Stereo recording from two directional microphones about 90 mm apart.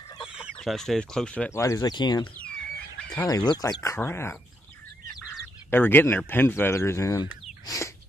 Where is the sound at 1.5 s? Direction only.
35° left (ahead or behind).